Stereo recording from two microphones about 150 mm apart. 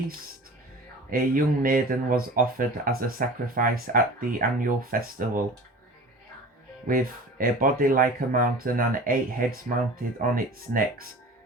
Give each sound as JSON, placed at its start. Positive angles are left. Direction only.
{"t": 1.1, "sound": "speech", "side_deg": -70}
{"t": 6.8, "sound": "speech", "side_deg": -70}